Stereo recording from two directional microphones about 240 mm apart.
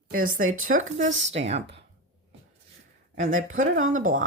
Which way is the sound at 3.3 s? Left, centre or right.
Right.